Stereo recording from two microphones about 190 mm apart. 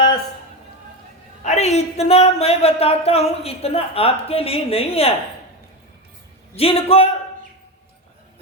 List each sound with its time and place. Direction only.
1.5 s speech: 35° left (ahead or behind)
6.6 s speech: 30° left (ahead or behind)